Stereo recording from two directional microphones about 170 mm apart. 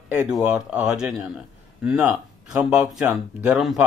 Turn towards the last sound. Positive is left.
turn(degrees=0)  # may be behind; listen again after turning